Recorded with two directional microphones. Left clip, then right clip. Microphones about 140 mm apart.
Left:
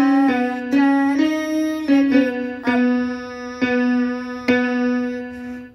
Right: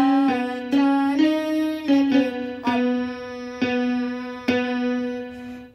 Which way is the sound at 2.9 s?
10° right (ahead or behind).